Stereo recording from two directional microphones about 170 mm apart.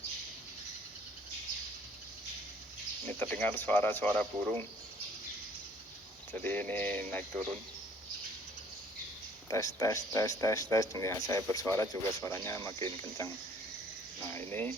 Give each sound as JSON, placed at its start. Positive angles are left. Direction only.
{"t": 3.1, "sound": "speech", "side_deg": 10}
{"t": 6.3, "sound": "speech", "side_deg": 10}
{"t": 9.5, "sound": "speech", "side_deg": 20}